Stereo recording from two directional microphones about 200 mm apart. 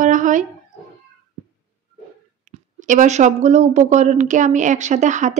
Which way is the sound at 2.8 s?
40° right (ahead or behind).